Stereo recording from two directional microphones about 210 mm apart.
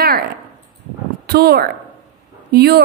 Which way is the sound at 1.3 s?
50° right (ahead or behind).